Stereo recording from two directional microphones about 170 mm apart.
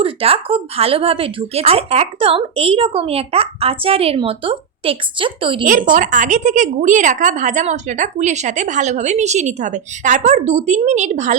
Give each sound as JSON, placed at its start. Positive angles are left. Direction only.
{"t": 0.0, "sound": "speech", "side_deg": -35}
{"t": 5.6, "sound": "a woman's voice", "side_deg": -50}